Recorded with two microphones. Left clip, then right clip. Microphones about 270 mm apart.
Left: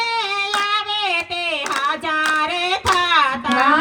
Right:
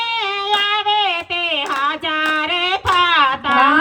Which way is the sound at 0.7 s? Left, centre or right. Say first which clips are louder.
Right 4 dB; right.